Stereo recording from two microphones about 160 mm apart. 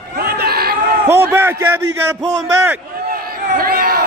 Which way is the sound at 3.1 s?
65° right (ahead or behind).